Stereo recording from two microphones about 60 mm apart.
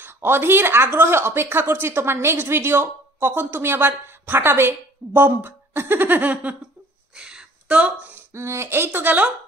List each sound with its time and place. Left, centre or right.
0.0 s speech: right
7.2 s a sound: centre
8.3 s speech: right